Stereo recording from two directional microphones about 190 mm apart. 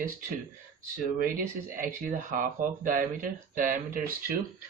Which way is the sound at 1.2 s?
45° right (ahead or behind).